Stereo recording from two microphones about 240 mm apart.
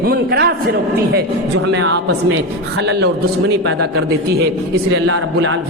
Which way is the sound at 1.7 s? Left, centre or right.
Right.